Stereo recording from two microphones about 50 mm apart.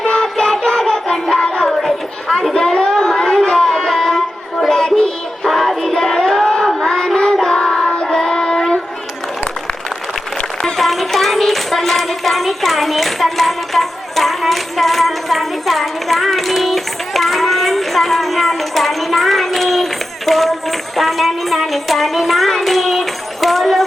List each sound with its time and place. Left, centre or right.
0.0 s child singing: centre
2.2 s chatter: centre
2.7 s music: centre
5.5 s music: centre
6.8 s child singing: centre
8.3 s child singing: centre
10.6 s child singing: centre